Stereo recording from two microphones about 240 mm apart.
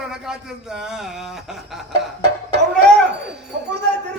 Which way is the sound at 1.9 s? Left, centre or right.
Right.